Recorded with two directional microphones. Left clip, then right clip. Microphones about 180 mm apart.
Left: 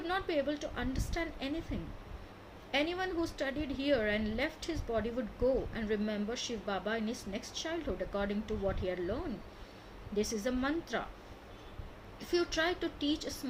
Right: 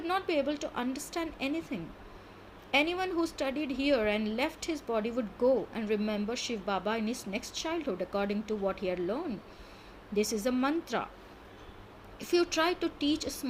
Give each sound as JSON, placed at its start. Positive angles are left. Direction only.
{"t": 0.0, "sound": "speech", "side_deg": -35}
{"t": 2.7, "sound": "speech", "side_deg": -35}
{"t": 10.2, "sound": "speech", "side_deg": -40}
{"t": 12.2, "sound": "speech", "side_deg": -35}